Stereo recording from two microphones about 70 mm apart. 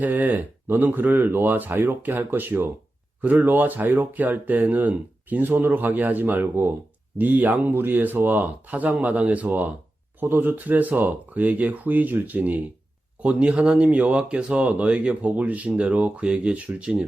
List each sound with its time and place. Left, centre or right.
0.0 s speech: right